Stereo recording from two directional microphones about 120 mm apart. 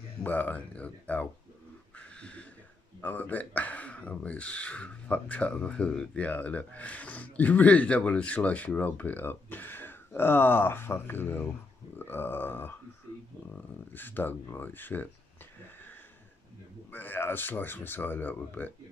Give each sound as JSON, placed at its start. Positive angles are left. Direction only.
{"t": 0.2, "sound": "speech", "side_deg": 15}
{"t": 2.0, "sound": "a sound", "side_deg": 10}
{"t": 3.0, "sound": "speech", "side_deg": 15}
{"t": 13.9, "sound": "speech", "side_deg": 15}
{"t": 16.9, "sound": "speech", "side_deg": 15}